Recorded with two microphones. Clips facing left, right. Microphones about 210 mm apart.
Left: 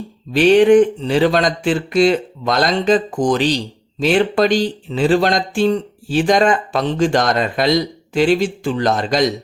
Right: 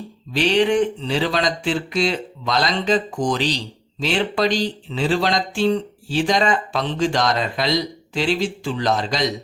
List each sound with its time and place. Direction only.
0.3 s speech: 50° left (ahead or behind)